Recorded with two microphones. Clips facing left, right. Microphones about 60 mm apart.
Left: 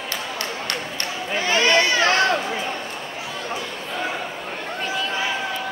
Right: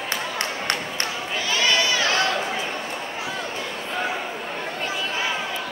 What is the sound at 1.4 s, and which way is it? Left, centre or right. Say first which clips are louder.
Run: left 4 dB; left.